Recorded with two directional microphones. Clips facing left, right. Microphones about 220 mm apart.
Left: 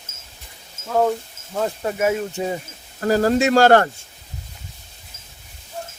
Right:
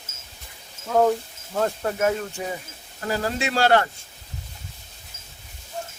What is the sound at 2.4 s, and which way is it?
Speech, 25° left (ahead or behind).